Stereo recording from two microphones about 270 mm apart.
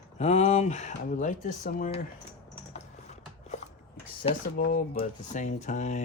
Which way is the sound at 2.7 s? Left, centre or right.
Left.